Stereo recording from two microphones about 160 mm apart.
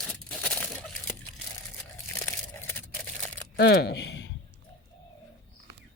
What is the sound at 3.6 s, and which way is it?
Speech, 90° left.